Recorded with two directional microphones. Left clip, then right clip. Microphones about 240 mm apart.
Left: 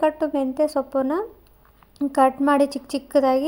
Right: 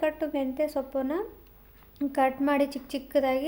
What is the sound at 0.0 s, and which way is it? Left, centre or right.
A woman's voice, left.